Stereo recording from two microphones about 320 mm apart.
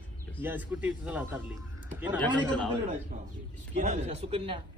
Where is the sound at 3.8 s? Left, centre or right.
Centre.